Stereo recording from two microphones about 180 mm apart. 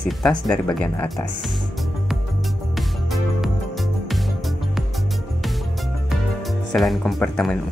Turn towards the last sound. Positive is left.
turn(degrees=5)  # may be behind; listen again after turning